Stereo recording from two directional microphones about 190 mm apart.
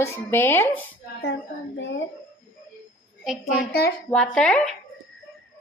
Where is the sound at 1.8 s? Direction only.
70° left (ahead or behind).